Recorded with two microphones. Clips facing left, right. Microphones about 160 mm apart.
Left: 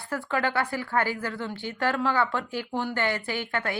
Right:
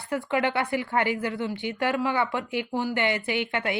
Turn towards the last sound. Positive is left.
turn(degrees=-20)  # may be behind; listen again after turning